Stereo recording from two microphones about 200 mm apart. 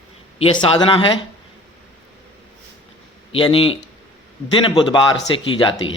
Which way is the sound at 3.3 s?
25° left (ahead or behind).